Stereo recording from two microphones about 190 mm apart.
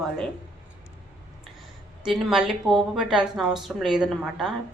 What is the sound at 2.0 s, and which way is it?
Speech, 5° right (ahead or behind).